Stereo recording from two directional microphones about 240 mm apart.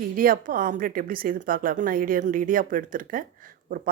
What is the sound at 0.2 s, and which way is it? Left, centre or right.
A woman's voice, right.